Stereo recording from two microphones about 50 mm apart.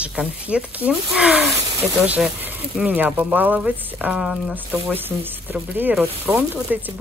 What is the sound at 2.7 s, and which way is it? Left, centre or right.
Speech, right.